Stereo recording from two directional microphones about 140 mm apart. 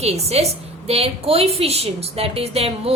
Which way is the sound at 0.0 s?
50° right (ahead or behind).